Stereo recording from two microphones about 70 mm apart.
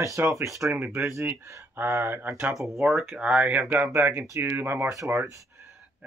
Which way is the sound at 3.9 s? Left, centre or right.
Right.